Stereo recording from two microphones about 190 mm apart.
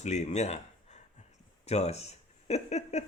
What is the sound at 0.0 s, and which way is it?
Speech, 35° left (ahead or behind).